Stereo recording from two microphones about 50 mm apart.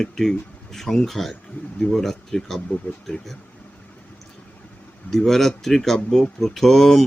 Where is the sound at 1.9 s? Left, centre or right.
Centre.